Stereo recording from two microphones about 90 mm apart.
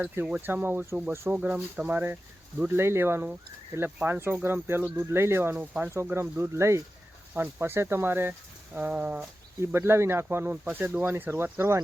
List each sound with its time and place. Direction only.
0.4 s speech: 20° right (ahead or behind)
1.1 s speech: 30° right (ahead or behind)
1.4 s speech: 15° right (ahead or behind)
9.6 s speech: 30° right (ahead or behind)